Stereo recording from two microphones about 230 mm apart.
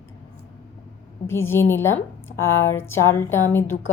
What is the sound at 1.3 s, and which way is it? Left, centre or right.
A woman's voice, centre.